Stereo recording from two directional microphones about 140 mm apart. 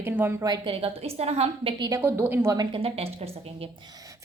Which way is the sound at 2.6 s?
40° right (ahead or behind).